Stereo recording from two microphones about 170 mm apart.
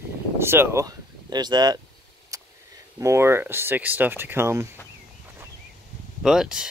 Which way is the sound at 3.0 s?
15° right (ahead or behind).